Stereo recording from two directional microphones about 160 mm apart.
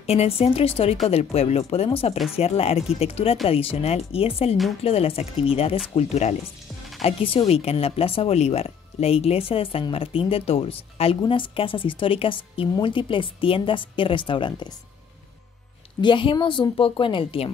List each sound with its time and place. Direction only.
0.0 s speech: 40° left (ahead or behind)
16.0 s speech: 30° left (ahead or behind)